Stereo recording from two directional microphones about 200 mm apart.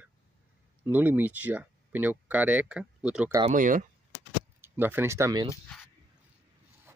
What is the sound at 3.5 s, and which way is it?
Speech, 40° right (ahead or behind).